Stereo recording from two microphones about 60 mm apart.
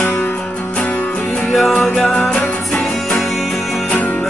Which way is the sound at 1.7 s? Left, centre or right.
Centre.